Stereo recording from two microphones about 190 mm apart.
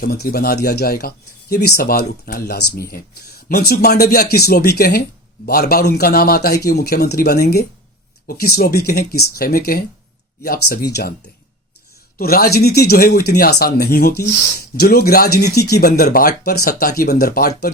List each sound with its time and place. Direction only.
0.0 s speech: 55° left (ahead or behind)
12.1 s speech: 50° left (ahead or behind)